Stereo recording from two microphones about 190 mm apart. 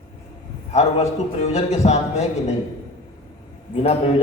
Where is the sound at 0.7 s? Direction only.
35° left (ahead or behind).